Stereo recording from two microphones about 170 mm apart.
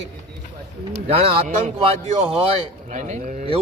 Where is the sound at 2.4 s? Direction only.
40° right (ahead or behind).